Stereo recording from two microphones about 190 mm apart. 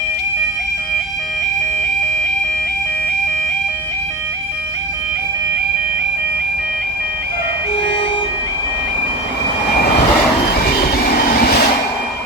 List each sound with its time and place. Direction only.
11.3 s vehicle: 55° left (ahead or behind)